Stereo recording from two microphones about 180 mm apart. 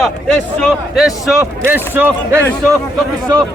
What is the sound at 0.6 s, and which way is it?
Speech, centre (ahead or behind).